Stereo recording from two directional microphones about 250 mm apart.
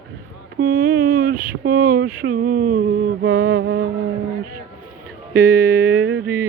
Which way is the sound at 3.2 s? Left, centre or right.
Right.